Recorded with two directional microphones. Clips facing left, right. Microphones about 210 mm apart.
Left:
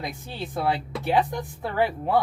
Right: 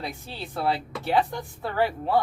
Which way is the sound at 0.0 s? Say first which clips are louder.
Left 2 dB; 15° left (ahead or behind).